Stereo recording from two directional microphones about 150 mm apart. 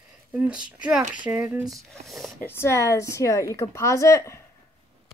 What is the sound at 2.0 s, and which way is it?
Speech, centre (ahead or behind).